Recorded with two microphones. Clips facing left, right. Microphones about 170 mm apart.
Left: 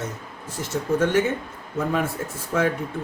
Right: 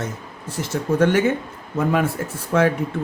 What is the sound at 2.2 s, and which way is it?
Speech, 80° right.